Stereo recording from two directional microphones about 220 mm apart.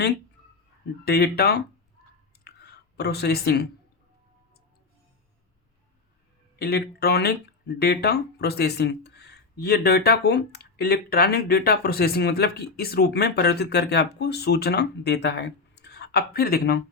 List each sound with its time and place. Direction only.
1.0 s speech: 45° left (ahead or behind)
2.4 s clicking: 50° left (ahead or behind)
6.6 s speech: 45° left (ahead or behind)